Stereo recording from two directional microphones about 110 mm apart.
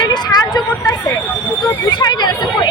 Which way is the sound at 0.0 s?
40° left (ahead or behind).